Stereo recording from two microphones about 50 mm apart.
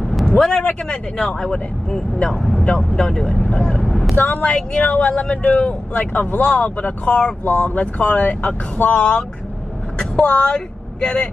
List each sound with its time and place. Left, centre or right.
0.0 s vehicle: centre
0.3 s speech: centre
4.5 s speech: centre
5.4 s speech: left